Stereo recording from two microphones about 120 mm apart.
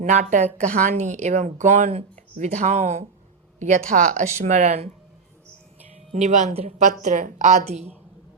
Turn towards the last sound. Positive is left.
turn(degrees=-65)  # may be behind; listen again after turning